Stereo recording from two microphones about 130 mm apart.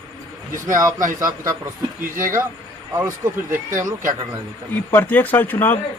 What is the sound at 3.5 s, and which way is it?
Speech, 90° right.